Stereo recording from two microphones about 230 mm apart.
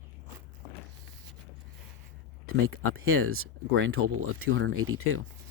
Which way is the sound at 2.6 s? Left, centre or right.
Right.